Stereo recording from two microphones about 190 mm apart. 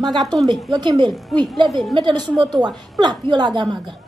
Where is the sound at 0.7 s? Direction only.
25° right (ahead or behind).